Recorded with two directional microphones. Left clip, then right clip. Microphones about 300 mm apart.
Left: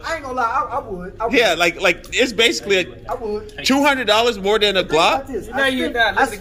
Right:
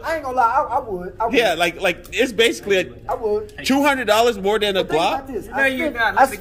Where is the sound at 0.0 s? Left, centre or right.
Centre.